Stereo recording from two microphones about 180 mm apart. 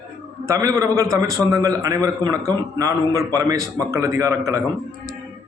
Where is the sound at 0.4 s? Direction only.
15° right (ahead or behind).